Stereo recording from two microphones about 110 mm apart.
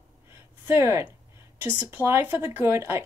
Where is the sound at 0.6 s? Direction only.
25° right (ahead or behind).